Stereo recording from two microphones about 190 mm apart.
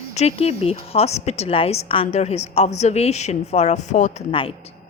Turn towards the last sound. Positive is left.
turn(degrees=30)  # may be behind; listen again after turning